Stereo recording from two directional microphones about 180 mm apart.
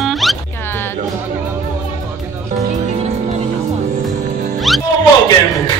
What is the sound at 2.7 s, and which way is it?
Music, 40° right (ahead or behind).